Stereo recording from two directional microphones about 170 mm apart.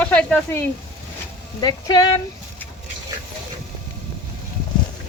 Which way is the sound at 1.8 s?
25° left (ahead or behind).